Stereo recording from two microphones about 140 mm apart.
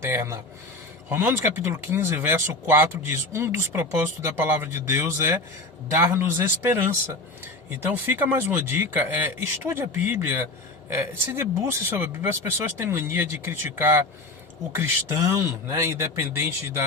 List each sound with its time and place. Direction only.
0.0 s speech: 20° right (ahead or behind)